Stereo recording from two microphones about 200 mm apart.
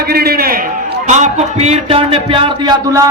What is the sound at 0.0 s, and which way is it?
A man's voice, 50° right (ahead or behind).